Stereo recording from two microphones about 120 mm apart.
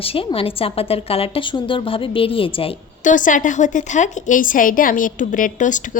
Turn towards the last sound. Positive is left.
turn(degrees=90)